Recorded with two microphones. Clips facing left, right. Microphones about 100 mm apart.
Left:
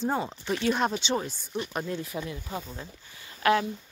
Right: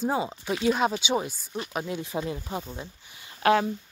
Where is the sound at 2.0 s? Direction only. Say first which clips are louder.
Right 4 dB; 25° right (ahead or behind).